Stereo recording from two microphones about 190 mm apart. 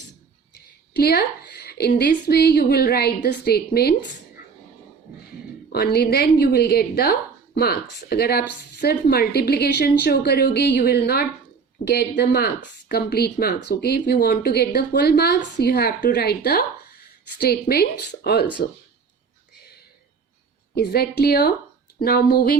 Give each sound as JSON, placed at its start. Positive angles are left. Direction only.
{"t": 0.9, "sound": "a woman's voice", "side_deg": 55}
{"t": 5.7, "sound": "a woman's voice", "side_deg": 55}
{"t": 20.7, "sound": "a woman's voice", "side_deg": 55}